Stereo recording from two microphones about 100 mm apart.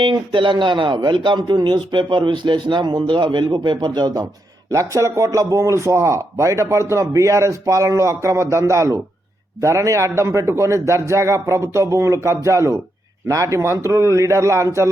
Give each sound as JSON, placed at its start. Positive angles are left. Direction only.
{"t": 0.0, "sound": "speech", "side_deg": -55}
{"t": 4.7, "sound": "a man's voice", "side_deg": -30}